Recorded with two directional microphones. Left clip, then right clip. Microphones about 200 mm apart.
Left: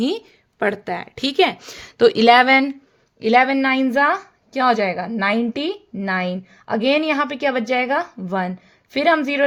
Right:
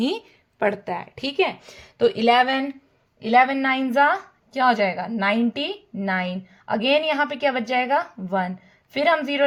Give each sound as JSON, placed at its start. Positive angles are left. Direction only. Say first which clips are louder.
{"t": 0.6, "sound": "a woman's voice", "louder": "left 2 dB", "side_deg": 20}